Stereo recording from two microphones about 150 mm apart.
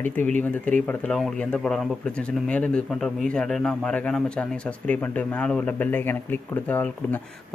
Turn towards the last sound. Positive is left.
turn(degrees=10)  # may be behind; listen again after turning